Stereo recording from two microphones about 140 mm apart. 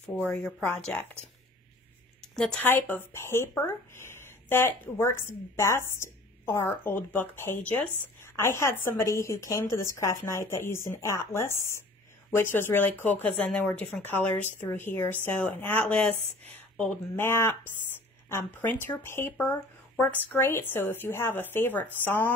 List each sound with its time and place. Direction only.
0.1 s speech: 10° left (ahead or behind)
2.3 s speech: 5° left (ahead or behind)